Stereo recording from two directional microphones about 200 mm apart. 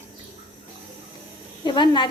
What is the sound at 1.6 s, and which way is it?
Speech, 25° left (ahead or behind).